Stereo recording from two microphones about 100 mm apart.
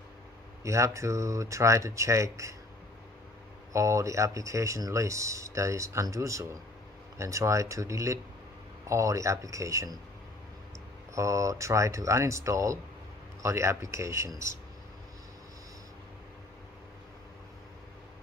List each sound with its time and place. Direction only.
0.7 s speech: 30° right (ahead or behind)
3.7 s speech: 30° right (ahead or behind)
11.1 s speech: 30° right (ahead or behind)